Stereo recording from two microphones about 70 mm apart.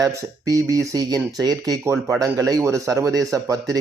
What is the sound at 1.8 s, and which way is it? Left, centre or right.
Speech, right.